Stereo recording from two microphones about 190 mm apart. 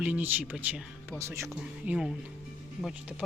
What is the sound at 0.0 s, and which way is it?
Speech, 10° right (ahead or behind).